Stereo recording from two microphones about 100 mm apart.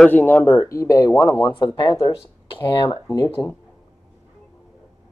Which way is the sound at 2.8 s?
35° left (ahead or behind).